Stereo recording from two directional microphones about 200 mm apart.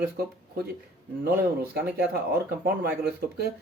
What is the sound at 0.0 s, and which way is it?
Speech, 50° right (ahead or behind).